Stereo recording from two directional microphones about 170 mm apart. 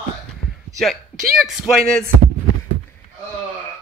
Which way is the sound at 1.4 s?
Centre (ahead or behind).